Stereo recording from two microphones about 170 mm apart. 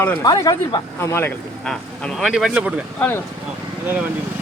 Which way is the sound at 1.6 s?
5° left (ahead or behind).